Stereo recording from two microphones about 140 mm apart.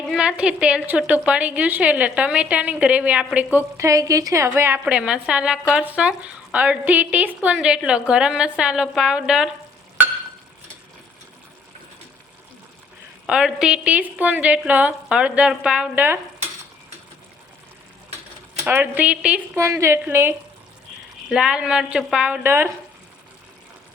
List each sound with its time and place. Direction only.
0.1 s speech: 5° right (ahead or behind)
13.2 s speech: 5° right (ahead or behind)
18.7 s speech: 10° right (ahead or behind)
19.5 s a woman's voice: 20° right (ahead or behind)
21.2 s speech: 5° right (ahead or behind)